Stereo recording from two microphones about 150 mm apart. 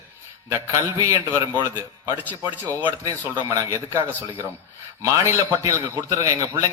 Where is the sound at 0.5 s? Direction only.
20° right (ahead or behind).